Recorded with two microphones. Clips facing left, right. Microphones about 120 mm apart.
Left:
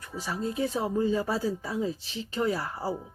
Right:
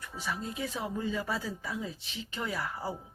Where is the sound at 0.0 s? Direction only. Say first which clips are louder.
Left 5 dB; 35° left (ahead or behind).